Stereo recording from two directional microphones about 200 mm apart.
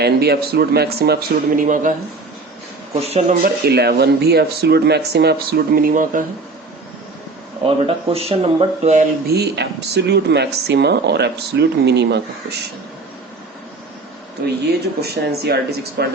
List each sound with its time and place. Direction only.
0.0 s speech: 55° right (ahead or behind)
2.9 s speech: 30° right (ahead or behind)
3.4 s speech: 50° right (ahead or behind)
7.6 s speech: 30° right (ahead or behind)
9.2 s speech: 55° right (ahead or behind)
15.0 s speech: 55° right (ahead or behind)